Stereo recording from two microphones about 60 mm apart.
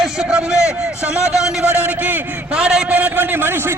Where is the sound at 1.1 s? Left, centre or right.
Left.